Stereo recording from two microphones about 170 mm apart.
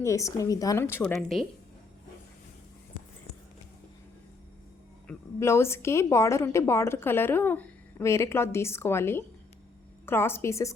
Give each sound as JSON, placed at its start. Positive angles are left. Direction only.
{"t": 0.0, "sound": "a woman's voice", "side_deg": 20}
{"t": 1.1, "sound": "a woman's voice", "side_deg": 0}
{"t": 5.0, "sound": "a woman's voice", "side_deg": 15}